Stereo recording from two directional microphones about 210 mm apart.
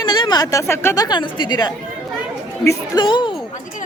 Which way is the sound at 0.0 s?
20° left (ahead or behind).